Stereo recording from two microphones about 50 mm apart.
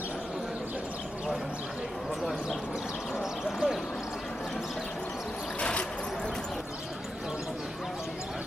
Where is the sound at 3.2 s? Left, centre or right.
Centre.